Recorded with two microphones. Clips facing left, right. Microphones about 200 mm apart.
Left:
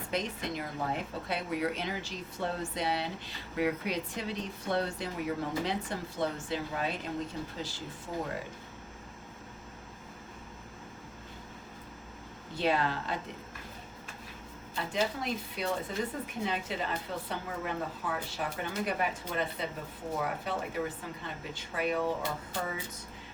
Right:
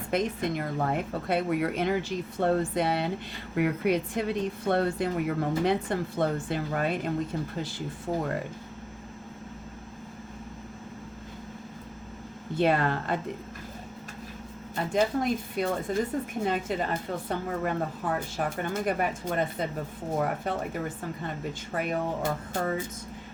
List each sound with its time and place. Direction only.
0.1 s a woman's voice: 55° right (ahead or behind)
12.5 s speech: 55° right (ahead or behind)
14.9 s speech: 50° right (ahead or behind)